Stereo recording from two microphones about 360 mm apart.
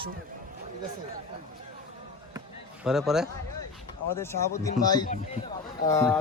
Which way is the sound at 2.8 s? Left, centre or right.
Centre.